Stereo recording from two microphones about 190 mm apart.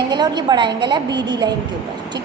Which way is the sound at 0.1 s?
20° right (ahead or behind).